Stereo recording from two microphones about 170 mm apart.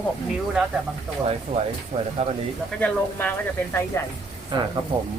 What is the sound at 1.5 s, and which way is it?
Speech, 60° right (ahead or behind).